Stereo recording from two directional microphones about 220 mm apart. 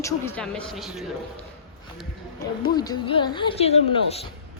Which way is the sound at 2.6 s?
20° left (ahead or behind).